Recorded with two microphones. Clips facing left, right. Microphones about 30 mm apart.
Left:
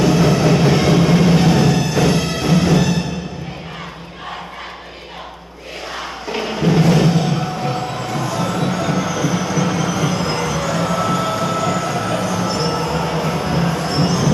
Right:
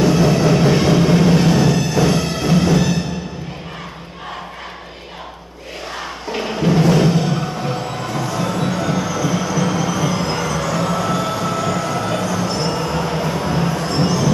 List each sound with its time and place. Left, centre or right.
0.0 s music: centre
6.2 s music: centre